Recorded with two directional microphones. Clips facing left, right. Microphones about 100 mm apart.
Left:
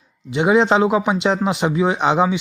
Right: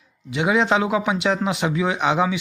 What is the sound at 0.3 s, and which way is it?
Speech, 30° left (ahead or behind).